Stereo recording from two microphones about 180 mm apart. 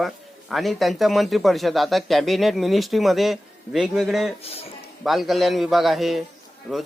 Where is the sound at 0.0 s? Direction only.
Centre (ahead or behind).